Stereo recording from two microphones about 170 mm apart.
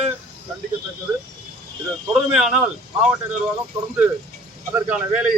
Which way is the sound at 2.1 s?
5° right (ahead or behind).